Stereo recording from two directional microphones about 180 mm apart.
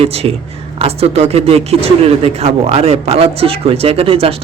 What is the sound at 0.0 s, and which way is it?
Speech, 35° right (ahead or behind).